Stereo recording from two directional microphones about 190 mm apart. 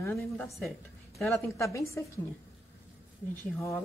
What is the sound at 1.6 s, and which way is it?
Speech, 15° left (ahead or behind).